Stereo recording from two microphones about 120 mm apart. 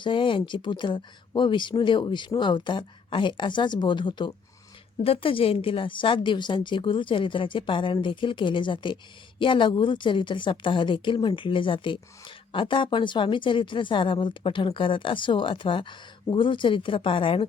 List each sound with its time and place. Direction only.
0.0 s speech: 45° left (ahead or behind)
5.0 s a woman's voice: 50° left (ahead or behind)